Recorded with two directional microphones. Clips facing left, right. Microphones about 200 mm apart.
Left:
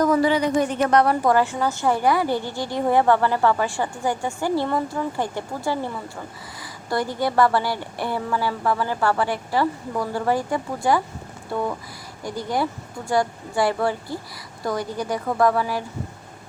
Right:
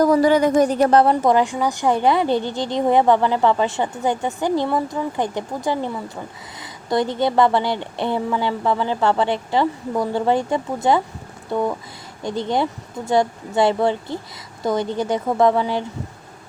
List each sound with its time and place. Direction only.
0.0 s a woman's voice: 40° right (ahead or behind); by 11.0 s 20° right (ahead or behind)
12.2 s a woman's voice: 25° right (ahead or behind)